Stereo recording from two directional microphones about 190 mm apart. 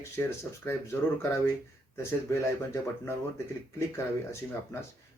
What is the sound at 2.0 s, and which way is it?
Speech, 15° left (ahead or behind).